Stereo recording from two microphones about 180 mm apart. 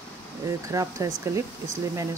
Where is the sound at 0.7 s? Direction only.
15° right (ahead or behind).